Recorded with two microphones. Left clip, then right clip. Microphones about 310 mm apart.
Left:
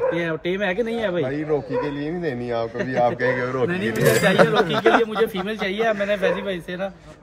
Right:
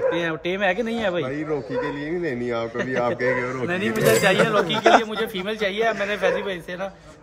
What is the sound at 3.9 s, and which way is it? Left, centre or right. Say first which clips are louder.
Speech: right 1 dB; centre.